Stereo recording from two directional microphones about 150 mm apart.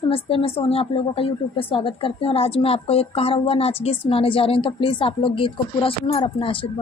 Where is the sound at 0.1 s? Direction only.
35° left (ahead or behind).